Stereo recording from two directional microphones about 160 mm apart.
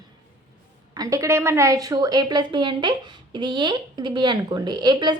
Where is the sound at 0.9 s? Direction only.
20° right (ahead or behind).